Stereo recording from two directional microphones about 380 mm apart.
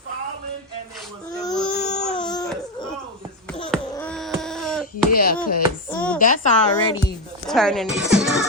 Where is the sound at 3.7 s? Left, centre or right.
Centre.